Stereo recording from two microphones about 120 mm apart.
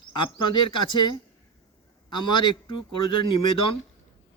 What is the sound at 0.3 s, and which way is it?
Speech, 40° left (ahead or behind).